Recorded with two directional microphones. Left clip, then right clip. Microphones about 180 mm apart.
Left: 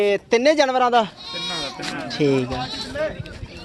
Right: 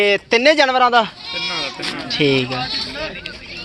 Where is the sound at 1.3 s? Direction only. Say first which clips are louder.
Right 4 dB; 35° left (ahead or behind).